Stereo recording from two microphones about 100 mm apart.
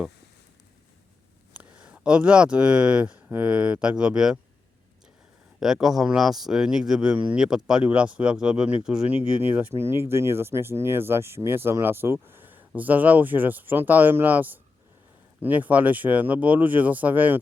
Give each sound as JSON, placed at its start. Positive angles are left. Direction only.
{"t": 1.5, "sound": "speech", "side_deg": -15}
{"t": 5.5, "sound": "speech", "side_deg": -5}
{"t": 9.1, "sound": "speech", "side_deg": -20}